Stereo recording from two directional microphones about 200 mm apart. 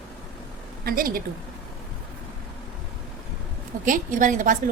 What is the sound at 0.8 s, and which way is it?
Speech, 45° right (ahead or behind).